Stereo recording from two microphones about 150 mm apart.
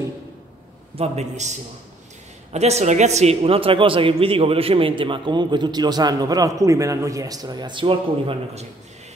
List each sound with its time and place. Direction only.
0.9 s a man's voice: 45° right (ahead or behind)
2.5 s a man's voice: 45° right (ahead or behind)